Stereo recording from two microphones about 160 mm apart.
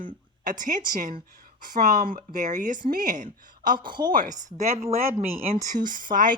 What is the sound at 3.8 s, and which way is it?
Speech, 30° right (ahead or behind).